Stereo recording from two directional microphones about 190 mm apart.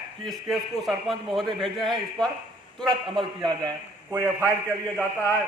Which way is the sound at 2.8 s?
25° right (ahead or behind).